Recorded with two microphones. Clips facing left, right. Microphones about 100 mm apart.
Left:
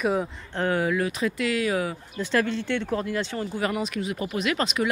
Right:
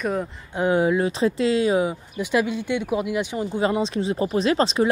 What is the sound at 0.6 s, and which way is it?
Speech, 20° right (ahead or behind).